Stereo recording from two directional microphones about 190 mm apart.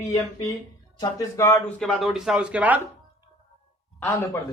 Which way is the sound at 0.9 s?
20° left (ahead or behind).